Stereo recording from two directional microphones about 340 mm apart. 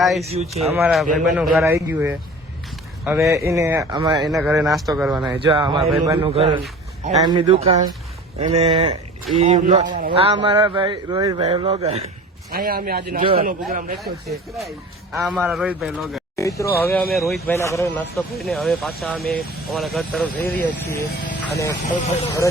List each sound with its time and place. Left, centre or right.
0.2 s a man's voice: centre
0.6 s a man's voice: centre
4.2 s a man's voice: centre; by 14.0 s right
15.1 s speech: centre